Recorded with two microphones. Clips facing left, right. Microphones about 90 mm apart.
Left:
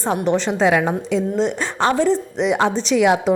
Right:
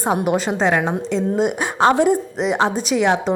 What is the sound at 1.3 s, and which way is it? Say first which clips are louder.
Speech: right 2 dB; 10° right (ahead or behind).